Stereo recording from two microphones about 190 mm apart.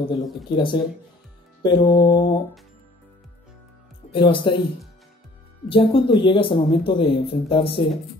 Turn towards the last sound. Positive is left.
turn(degrees=30)  # may be behind; listen again after turning